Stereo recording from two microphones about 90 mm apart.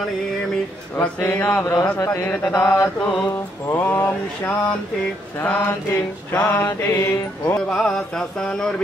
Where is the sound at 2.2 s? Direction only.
20° left (ahead or behind).